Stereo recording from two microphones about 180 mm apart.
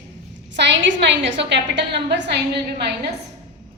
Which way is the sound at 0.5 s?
80° right.